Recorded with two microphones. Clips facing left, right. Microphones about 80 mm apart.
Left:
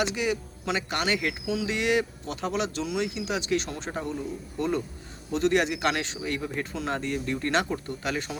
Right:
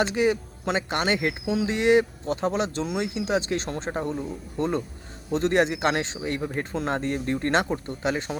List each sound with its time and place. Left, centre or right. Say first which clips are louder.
0.0 s speech: right 5 dB; right